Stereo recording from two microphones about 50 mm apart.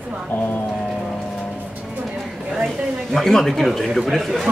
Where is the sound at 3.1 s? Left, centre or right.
Centre.